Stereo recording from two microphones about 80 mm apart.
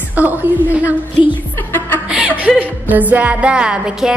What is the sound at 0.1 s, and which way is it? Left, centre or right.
Speech, right.